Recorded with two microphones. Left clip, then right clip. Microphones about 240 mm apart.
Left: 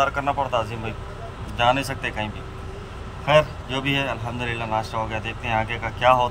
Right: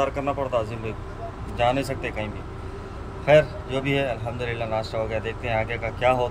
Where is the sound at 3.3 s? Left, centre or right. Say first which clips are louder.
Right 1 dB; centre.